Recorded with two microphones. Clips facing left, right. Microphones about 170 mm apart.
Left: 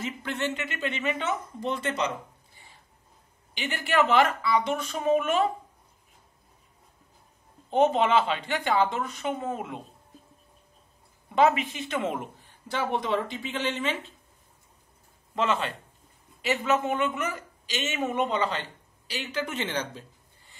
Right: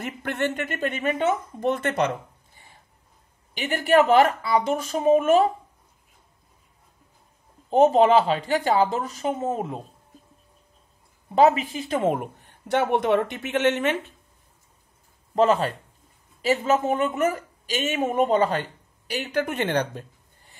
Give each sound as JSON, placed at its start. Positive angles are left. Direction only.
{"t": 0.0, "sound": "speech", "side_deg": -55}
{"t": 3.5, "sound": "speech", "side_deg": -45}
{"t": 7.7, "sound": "speech", "side_deg": -40}
{"t": 11.3, "sound": "a woman's voice", "side_deg": -40}
{"t": 15.3, "sound": "a woman's voice", "side_deg": -40}